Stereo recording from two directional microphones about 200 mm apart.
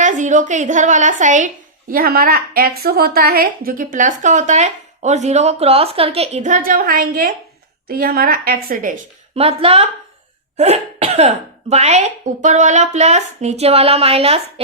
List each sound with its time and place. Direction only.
0.0 s a woman's voice: 40° right (ahead or behind)